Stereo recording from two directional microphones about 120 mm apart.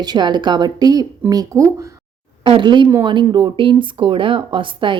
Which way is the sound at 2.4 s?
40° right (ahead or behind).